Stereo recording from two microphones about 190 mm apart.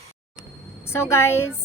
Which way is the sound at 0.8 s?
15° left (ahead or behind).